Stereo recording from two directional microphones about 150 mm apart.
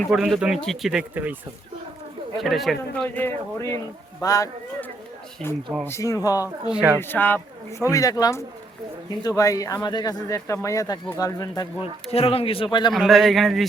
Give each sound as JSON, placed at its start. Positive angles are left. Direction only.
{"t": 0.0, "sound": "speech", "side_deg": -5}
{"t": 2.4, "sound": "a man's voice", "side_deg": 0}
{"t": 5.8, "sound": "speech", "side_deg": 20}
{"t": 6.7, "sound": "speech", "side_deg": -5}
{"t": 7.0, "sound": "speech", "side_deg": 15}
{"t": 12.1, "sound": "speech", "side_deg": 40}
{"t": 12.9, "sound": "speech", "side_deg": 0}